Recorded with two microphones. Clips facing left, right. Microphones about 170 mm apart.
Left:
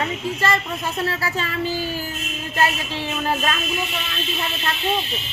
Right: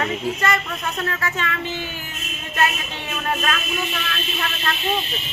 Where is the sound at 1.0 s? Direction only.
35° left (ahead or behind).